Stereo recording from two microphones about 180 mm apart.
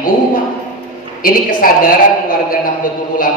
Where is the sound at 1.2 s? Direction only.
50° left (ahead or behind).